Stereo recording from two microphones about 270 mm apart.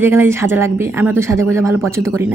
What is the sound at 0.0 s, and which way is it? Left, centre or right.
Speech, centre.